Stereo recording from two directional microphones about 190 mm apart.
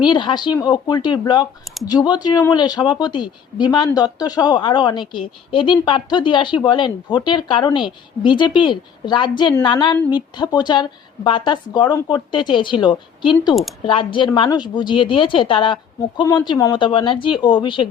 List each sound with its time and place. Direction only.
0.0 s a woman's voice: 25° left (ahead or behind)